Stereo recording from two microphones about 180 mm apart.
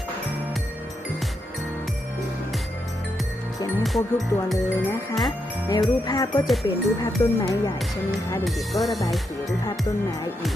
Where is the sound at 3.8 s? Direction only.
Centre (ahead or behind).